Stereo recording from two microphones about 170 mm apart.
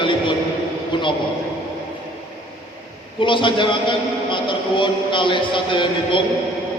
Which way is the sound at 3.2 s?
30° left (ahead or behind).